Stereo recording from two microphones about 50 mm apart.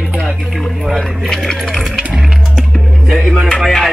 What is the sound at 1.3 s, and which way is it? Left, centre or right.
Speech, centre.